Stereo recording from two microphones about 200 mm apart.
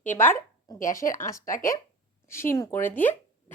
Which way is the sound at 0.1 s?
10° left (ahead or behind).